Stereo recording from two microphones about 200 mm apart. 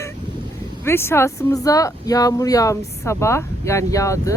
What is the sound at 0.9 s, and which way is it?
Speech, 10° left (ahead or behind).